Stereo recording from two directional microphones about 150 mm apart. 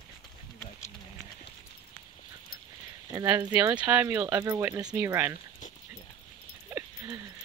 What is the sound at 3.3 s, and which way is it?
Speech, 10° right (ahead or behind).